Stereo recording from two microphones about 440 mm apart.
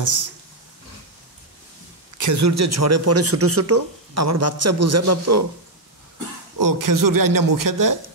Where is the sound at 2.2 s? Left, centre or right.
Right.